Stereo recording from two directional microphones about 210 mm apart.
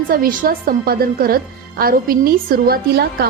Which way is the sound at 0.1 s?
45° right (ahead or behind).